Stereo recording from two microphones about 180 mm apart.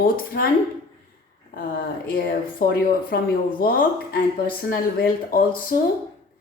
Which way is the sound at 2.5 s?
55° left (ahead or behind).